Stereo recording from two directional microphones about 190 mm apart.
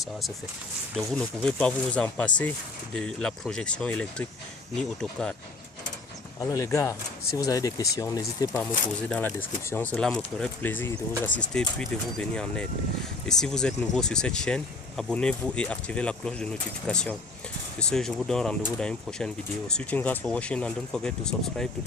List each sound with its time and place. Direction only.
0.9 s speech: 5° left (ahead or behind)
6.4 s speech: 15° left (ahead or behind)